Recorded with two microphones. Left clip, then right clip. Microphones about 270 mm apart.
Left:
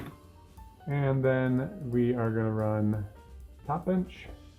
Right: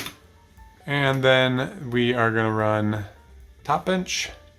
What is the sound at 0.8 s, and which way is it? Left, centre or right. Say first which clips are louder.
Speech: right 8 dB; right.